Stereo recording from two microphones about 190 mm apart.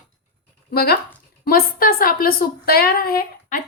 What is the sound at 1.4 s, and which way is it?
A woman's voice, 50° left (ahead or behind).